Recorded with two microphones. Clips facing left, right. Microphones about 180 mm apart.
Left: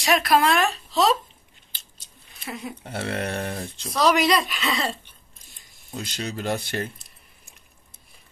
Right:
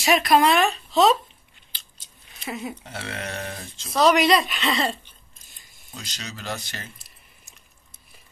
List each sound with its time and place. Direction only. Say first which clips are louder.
0.0 s speech: right 2 dB; centre (ahead or behind)
2.5 s speech: right 2 dB; 5° right (ahead or behind)
2.8 s speech: left 5 dB; 55° left (ahead or behind)
3.9 s speech: right 2 dB; centre (ahead or behind)
5.9 s speech: left 7 dB; 55° left (ahead or behind)